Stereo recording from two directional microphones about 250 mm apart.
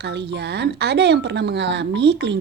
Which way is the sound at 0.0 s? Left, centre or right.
Right.